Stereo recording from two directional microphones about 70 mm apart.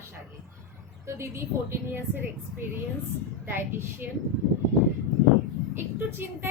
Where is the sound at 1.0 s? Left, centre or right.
Right.